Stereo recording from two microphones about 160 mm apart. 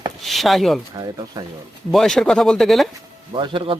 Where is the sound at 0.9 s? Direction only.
25° right (ahead or behind).